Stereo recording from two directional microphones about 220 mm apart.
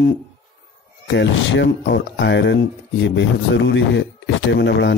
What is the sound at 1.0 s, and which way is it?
Speech, 55° left (ahead or behind).